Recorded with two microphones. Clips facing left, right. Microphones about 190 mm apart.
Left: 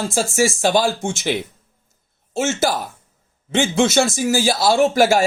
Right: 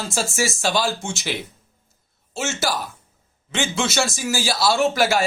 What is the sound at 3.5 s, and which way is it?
A man's voice, 50° left (ahead or behind).